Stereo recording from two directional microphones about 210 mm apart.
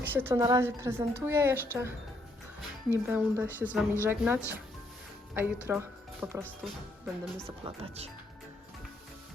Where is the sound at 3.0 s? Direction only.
10° right (ahead or behind).